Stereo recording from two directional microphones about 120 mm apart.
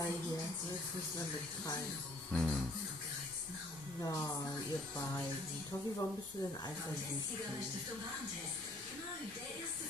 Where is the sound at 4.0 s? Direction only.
30° left (ahead or behind).